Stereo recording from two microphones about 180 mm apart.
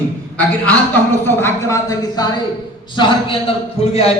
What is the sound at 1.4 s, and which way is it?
A man's voice, 15° left (ahead or behind).